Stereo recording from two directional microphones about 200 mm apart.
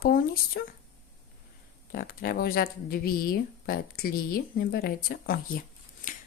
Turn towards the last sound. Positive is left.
turn(degrees=40)  # may be behind; listen again after turning